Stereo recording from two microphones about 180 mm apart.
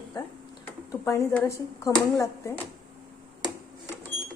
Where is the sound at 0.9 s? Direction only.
15° left (ahead or behind).